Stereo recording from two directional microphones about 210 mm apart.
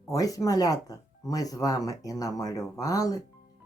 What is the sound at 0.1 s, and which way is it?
Speech, 15° left (ahead or behind).